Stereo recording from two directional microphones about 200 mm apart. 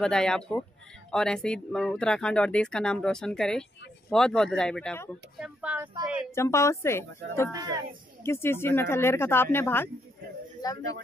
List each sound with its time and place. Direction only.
0.0 s speech: 5° left (ahead or behind)
5.4 s speech: 5° right (ahead or behind)
6.3 s a man's voice: 15° left (ahead or behind)